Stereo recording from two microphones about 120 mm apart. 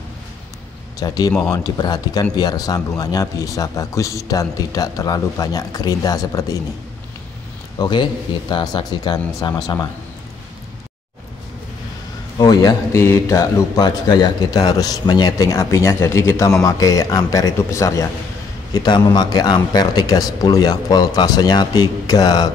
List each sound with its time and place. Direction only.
0.9 s a man's voice: 30° left (ahead or behind)
7.8 s a man's voice: 40° left (ahead or behind)
12.4 s speech: 35° left (ahead or behind)
12.9 s a man's voice: 20° left (ahead or behind)
18.7 s a man's voice: 35° left (ahead or behind)